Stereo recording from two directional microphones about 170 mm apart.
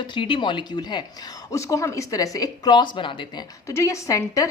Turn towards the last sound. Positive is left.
turn(degrees=20)  # may be behind; listen again after turning